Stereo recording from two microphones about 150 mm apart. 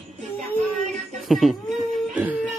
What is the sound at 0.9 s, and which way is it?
Music, centre (ahead or behind).